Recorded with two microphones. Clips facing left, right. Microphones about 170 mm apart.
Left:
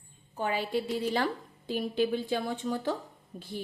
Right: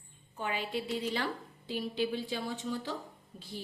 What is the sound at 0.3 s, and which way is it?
A woman's voice, 40° left (ahead or behind).